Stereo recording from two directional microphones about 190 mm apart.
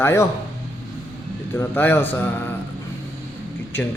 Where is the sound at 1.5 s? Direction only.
10° left (ahead or behind).